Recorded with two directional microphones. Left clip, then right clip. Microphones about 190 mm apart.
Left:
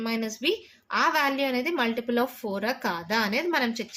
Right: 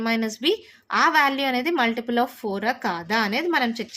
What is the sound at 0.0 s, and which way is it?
A woman's voice, 35° right (ahead or behind).